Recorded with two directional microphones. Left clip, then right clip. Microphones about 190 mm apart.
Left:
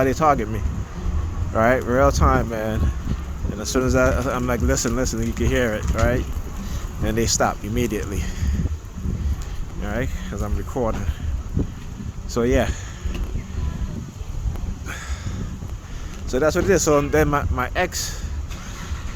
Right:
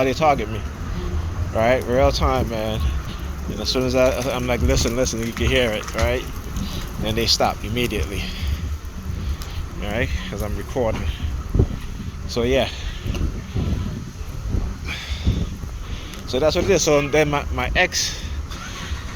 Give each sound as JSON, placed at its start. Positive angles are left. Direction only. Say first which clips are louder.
{"t": 0.0, "sound": "speech", "louder": "even", "side_deg": 50}
{"t": 3.6, "sound": "speech", "louder": "right 1 dB", "side_deg": 60}
{"t": 9.8, "sound": "speech", "louder": "right 3 dB", "side_deg": 30}
{"t": 12.3, "sound": "speech", "louder": "right 1 dB", "side_deg": 50}
{"t": 16.3, "sound": "speech", "louder": "even", "side_deg": 50}